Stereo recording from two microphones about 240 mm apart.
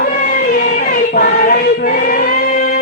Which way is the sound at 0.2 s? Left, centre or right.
Left.